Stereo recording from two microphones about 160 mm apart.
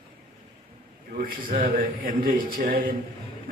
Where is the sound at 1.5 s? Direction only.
60° right (ahead or behind).